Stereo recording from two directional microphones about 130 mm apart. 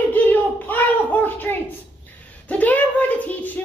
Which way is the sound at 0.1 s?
15° left (ahead or behind).